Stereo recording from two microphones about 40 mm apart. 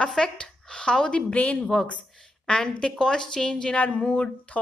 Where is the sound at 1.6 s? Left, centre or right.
Centre.